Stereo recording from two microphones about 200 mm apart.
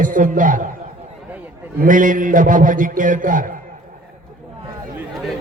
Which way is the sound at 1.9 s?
40° right (ahead or behind).